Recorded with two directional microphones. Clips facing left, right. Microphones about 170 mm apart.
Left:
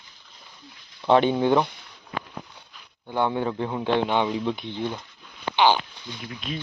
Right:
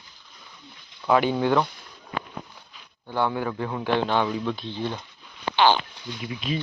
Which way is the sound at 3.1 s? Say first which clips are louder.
Left 1 dB; 20° left (ahead or behind).